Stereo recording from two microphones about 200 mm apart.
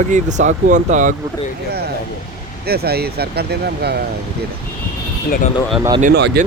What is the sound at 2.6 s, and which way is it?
Speech, 50° right (ahead or behind).